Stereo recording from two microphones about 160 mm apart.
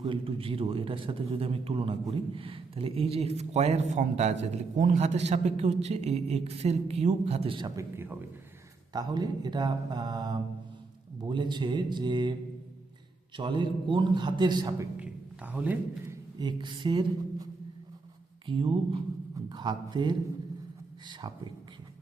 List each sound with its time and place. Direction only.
0.1 s a man's voice: 35° right (ahead or behind)
7.8 s a man's voice: 15° right (ahead or behind)
13.3 s speech: 30° right (ahead or behind)
14.9 s speech: 10° right (ahead or behind)
16.4 s a sound: 30° right (ahead or behind)
18.4 s a man's voice: 30° right (ahead or behind)